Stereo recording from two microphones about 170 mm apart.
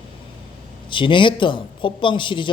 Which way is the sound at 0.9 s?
30° left (ahead or behind).